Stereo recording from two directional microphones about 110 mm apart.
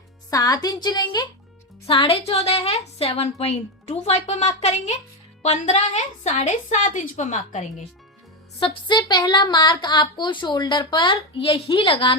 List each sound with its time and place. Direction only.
0.3 s a woman's voice: 35° left (ahead or behind)
1.9 s a woman's voice: 60° left (ahead or behind); by 7.6 s 90° left
8.5 s a woman's voice: 55° left (ahead or behind)
9.0 s a woman's voice: 40° left (ahead or behind)